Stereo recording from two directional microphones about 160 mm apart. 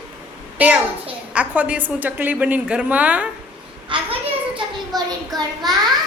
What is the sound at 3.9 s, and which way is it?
Speech, 30° right (ahead or behind).